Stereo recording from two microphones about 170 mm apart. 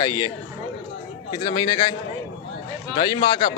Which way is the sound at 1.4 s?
25° left (ahead or behind).